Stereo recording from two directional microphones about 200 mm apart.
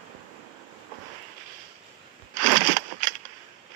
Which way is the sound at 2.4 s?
40° right (ahead or behind).